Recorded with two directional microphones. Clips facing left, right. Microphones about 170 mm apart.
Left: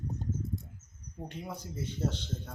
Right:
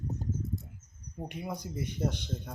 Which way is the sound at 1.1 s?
10° right (ahead or behind).